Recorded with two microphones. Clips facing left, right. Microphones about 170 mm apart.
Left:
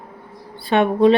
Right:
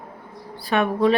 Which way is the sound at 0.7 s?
25° left (ahead or behind).